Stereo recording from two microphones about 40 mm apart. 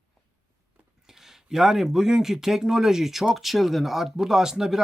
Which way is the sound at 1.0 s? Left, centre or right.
Centre.